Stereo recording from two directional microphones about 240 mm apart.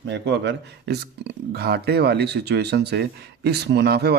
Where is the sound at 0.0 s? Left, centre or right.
Right.